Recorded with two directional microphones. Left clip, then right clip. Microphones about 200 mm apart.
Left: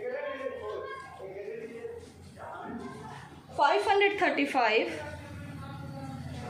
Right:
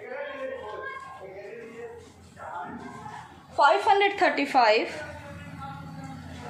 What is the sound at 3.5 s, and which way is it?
A woman's voice, 40° right (ahead or behind).